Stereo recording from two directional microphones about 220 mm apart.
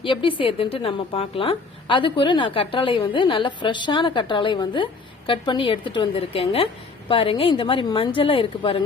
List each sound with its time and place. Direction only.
0.0 s a woman's voice: 25° left (ahead or behind)